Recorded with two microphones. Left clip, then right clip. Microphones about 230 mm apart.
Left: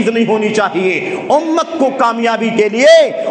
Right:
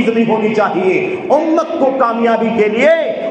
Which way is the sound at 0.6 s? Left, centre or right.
Left.